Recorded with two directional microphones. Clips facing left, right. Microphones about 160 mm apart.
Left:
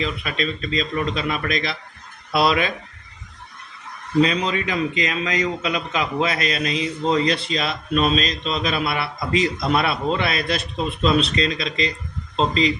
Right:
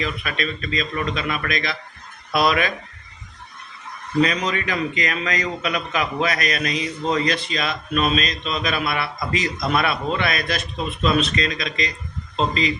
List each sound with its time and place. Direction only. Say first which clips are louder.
0.0 s a man's voice: left 1 dB; 30° left (ahead or behind)
4.2 s a man's voice: left 1 dB; 25° left (ahead or behind)